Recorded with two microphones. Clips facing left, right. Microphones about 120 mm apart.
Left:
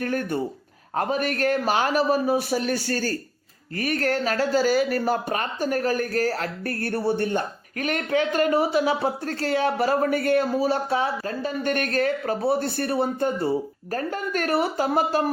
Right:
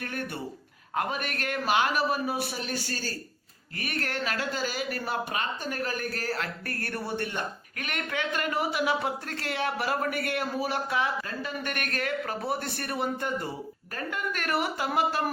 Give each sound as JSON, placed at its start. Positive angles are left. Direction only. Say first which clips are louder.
{"t": 0.0, "sound": "speech", "louder": "left 9 dB", "side_deg": 40}
{"t": 3.8, "sound": "speech", "louder": "left 9 dB", "side_deg": 40}